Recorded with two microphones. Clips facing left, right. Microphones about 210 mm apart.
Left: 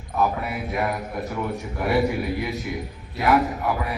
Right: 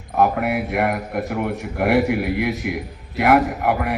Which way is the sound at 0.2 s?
65° right (ahead or behind).